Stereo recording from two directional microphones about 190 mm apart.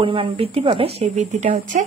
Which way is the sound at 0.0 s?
30° right (ahead or behind).